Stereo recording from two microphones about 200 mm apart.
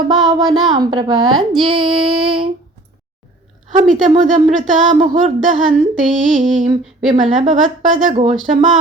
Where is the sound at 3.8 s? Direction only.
35° right (ahead or behind).